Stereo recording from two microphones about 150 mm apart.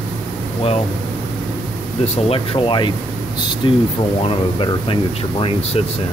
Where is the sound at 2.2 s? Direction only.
40° left (ahead or behind).